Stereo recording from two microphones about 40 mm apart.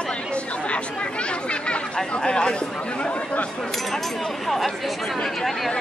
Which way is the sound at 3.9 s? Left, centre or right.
Centre.